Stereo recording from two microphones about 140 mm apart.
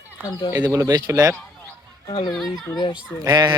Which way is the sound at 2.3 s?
Centre (ahead or behind).